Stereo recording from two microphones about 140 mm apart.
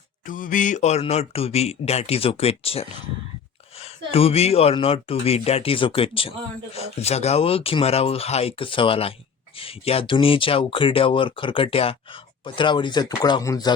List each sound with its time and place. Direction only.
0.3 s speech: 70° left (ahead or behind); by 13.7 s 25° left (ahead or behind)